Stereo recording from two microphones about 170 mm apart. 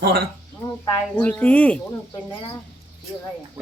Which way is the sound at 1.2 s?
10° left (ahead or behind).